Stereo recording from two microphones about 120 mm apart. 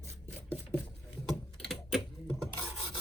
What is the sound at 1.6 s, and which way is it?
Typing, centre (ahead or behind).